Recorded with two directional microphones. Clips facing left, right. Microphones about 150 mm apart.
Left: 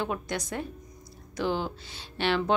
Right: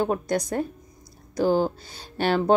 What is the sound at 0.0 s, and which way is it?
Speech, 40° right (ahead or behind).